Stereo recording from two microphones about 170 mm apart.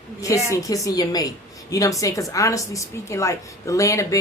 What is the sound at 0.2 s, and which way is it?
A woman's voice, 20° left (ahead or behind).